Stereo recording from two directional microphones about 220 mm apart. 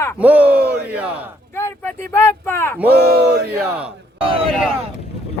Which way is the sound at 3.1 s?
45° right (ahead or behind).